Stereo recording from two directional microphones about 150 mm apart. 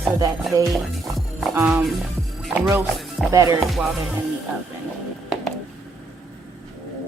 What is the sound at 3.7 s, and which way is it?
Music, centre (ahead or behind).